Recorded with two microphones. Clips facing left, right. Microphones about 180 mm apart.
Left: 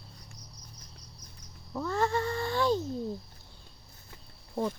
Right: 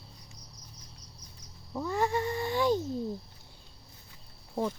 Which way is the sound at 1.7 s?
15° right (ahead or behind).